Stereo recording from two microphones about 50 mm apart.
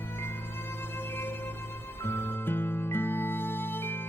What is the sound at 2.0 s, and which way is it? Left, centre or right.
Music, left.